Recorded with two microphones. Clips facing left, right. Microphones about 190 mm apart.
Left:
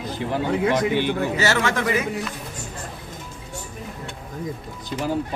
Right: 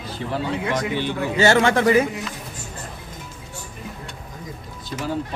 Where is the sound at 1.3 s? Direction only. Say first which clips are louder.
Right 5 dB; 30° right (ahead or behind).